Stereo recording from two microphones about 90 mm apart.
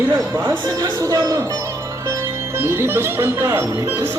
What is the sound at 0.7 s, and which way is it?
Speech, 40° right (ahead or behind).